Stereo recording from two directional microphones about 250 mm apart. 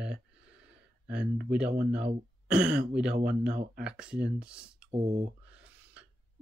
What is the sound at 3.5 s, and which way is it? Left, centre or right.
Speech, right.